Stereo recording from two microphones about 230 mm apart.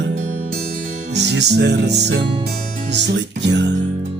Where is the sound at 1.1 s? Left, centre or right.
Right.